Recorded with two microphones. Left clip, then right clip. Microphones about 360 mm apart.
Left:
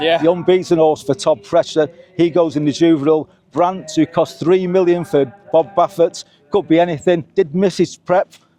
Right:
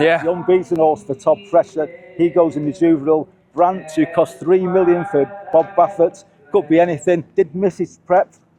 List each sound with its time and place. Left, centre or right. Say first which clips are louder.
0.4 s a man's voice: left 2 dB; left
3.9 s a man's voice: even; left
4.4 s a man's voice: left 1 dB; left
6.5 s a man's voice: even; left
7.5 s a man's voice: left 3 dB; left